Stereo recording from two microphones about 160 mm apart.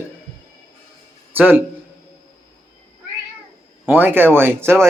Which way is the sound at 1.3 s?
10° right (ahead or behind).